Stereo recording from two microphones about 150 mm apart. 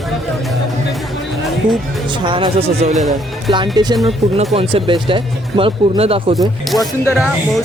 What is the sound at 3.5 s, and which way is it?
Speech, 30° right (ahead or behind).